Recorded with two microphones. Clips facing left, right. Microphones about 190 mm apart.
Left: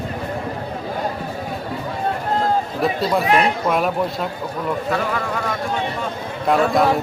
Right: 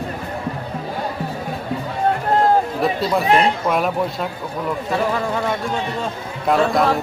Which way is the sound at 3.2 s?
30° right (ahead or behind).